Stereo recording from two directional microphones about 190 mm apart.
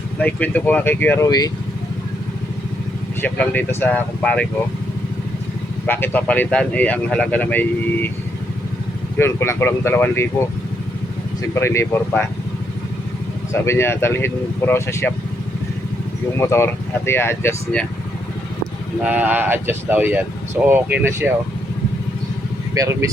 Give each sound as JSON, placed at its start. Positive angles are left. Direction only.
{"t": 0.2, "sound": "speech", "side_deg": 5}
{"t": 3.2, "sound": "speech", "side_deg": 10}
{"t": 5.8, "sound": "speech", "side_deg": 10}
{"t": 9.1, "sound": "speech", "side_deg": 15}
{"t": 11.5, "sound": "speech", "side_deg": 15}
{"t": 13.5, "sound": "speech", "side_deg": 15}
{"t": 16.4, "sound": "speech", "side_deg": 15}
{"t": 19.0, "sound": "speech", "side_deg": -5}
{"t": 22.7, "sound": "speech", "side_deg": -15}